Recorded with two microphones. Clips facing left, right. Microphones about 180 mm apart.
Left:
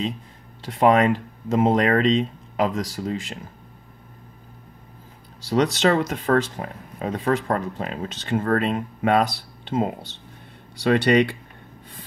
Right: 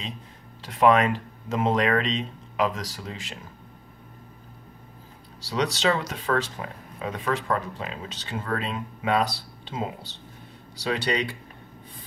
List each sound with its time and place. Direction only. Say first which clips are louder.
0.7 s speech: left 3 dB; 30° left (ahead or behind)
5.4 s speech: left 6 dB; 50° left (ahead or behind)